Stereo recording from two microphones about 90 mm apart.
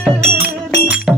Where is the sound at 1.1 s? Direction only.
10° right (ahead or behind).